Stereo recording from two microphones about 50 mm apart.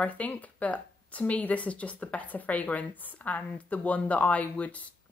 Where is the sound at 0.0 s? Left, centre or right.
Left.